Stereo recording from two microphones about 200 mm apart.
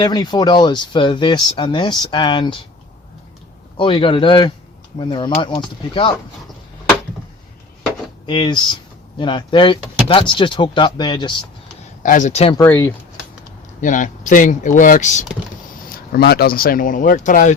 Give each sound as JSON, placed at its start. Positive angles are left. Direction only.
{"t": 0.0, "sound": "speech", "side_deg": 20}
{"t": 3.8, "sound": "speech", "side_deg": 25}
{"t": 8.3, "sound": "speech", "side_deg": 20}
{"t": 12.0, "sound": "speech", "side_deg": 40}
{"t": 12.5, "sound": "speech", "side_deg": 10}
{"t": 13.8, "sound": "speech", "side_deg": 40}
{"t": 16.1, "sound": "speech", "side_deg": 50}